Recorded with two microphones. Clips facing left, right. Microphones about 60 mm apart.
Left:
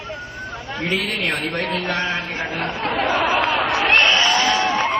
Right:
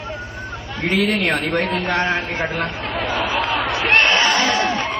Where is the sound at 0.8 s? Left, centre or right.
Right.